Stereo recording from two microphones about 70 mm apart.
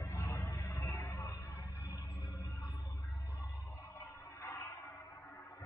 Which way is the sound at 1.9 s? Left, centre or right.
Left.